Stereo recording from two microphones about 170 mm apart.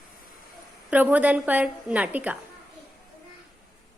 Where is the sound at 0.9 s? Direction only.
10° right (ahead or behind).